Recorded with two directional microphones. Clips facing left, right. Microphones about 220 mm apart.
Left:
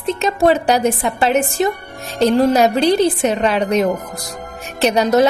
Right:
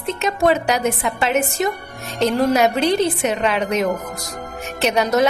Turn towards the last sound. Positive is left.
turn(degrees=30)  # may be behind; listen again after turning